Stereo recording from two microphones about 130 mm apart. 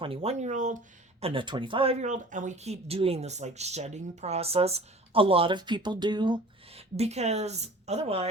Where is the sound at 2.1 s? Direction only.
75° right (ahead or behind); by 6.4 s 35° right (ahead or behind).